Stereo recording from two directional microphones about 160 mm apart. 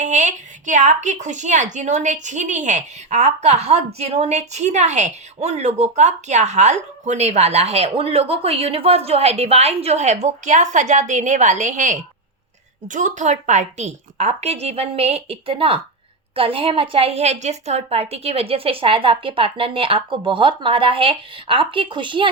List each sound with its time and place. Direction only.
0.0 s a woman's voice: 50° right (ahead or behind); by 22.3 s 30° right (ahead or behind)